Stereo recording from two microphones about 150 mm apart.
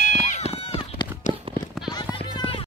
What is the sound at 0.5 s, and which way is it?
Run, 40° left (ahead or behind).